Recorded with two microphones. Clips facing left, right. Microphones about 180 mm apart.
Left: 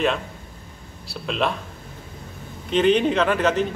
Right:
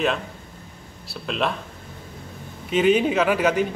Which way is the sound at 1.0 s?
Centre (ahead or behind).